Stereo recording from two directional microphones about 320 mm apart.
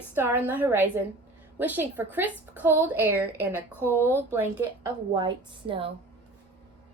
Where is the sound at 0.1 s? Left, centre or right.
Centre.